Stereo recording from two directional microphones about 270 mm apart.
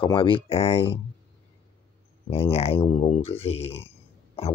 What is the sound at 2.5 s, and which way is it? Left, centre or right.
Speech, left.